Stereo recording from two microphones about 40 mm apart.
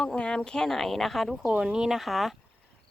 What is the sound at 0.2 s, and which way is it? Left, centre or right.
Speech, left.